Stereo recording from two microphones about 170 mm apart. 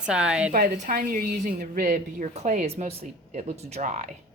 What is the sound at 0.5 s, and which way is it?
A woman's voice, 55° right (ahead or behind).